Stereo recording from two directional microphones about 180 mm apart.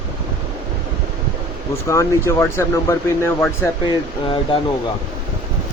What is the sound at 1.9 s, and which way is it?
Speech, 15° left (ahead or behind).